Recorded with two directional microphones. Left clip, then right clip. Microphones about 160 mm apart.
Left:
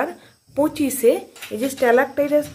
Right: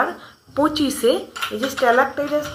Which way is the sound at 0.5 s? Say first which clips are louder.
Right 1 dB; 35° left (ahead or behind).